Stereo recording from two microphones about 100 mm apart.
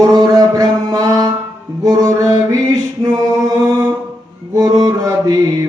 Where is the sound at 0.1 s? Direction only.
45° right (ahead or behind).